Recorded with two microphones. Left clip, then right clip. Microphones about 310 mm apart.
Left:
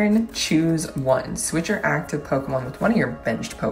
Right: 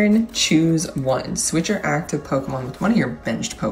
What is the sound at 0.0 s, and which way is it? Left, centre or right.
Speech, centre.